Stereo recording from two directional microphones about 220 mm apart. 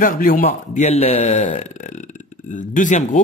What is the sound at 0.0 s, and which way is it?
Speech, 40° left (ahead or behind).